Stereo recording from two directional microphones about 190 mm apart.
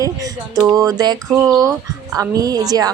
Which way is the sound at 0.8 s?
20° right (ahead or behind).